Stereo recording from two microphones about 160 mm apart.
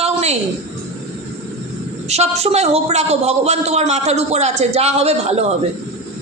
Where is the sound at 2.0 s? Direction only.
40° right (ahead or behind).